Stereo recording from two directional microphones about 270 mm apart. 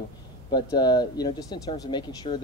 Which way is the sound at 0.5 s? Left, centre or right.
Centre.